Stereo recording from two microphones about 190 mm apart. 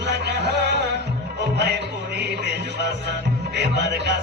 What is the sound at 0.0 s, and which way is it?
Music, 65° right (ahead or behind).